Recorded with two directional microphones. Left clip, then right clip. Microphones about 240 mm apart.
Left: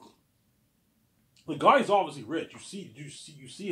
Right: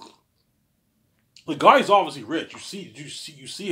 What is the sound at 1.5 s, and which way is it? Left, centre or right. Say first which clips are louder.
Speech: right 6 dB; right.